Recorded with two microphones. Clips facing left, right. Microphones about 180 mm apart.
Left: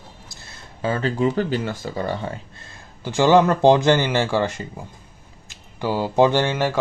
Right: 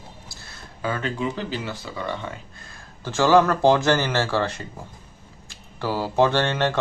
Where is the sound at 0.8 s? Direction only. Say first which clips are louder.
Left 5 dB; 30° left (ahead or behind).